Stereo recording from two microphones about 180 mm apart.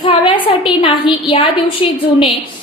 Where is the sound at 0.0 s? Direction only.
30° left (ahead or behind).